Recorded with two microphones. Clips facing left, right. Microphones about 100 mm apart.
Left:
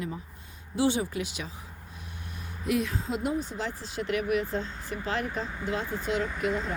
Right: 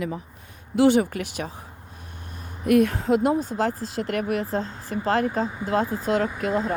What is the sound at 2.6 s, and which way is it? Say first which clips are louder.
Speech: right 10 dB; 55° right (ahead or behind).